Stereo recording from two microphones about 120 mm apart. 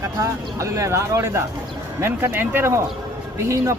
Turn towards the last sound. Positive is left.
turn(degrees=-25)  # may be behind; listen again after turning